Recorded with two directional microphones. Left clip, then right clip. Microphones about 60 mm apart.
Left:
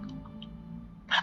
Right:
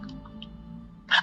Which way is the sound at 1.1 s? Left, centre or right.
Right.